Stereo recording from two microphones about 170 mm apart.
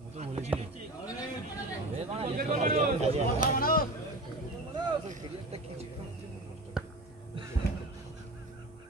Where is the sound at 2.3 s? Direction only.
50° right (ahead or behind).